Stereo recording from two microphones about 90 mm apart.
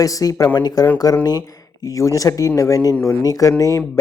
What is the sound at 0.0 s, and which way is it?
Speech, 40° left (ahead or behind).